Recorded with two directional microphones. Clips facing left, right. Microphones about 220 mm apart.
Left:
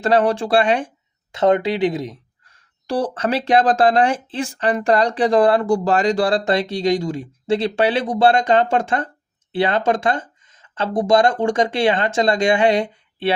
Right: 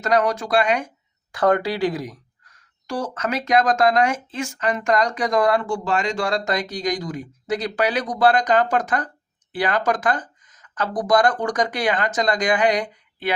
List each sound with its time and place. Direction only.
0.0 s speech: 30° left (ahead or behind)